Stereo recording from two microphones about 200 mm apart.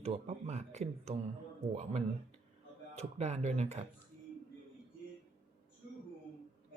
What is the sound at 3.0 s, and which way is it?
Speech, 35° right (ahead or behind).